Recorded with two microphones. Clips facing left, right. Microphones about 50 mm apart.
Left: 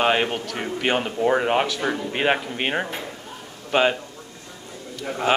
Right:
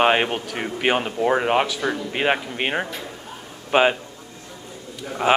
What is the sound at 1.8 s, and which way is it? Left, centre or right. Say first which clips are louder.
Speech: even; centre.